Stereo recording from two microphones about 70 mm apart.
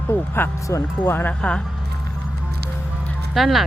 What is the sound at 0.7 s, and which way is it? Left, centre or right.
Speech, left.